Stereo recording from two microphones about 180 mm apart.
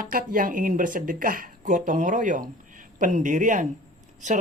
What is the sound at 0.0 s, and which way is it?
Speech, 50° right (ahead or behind).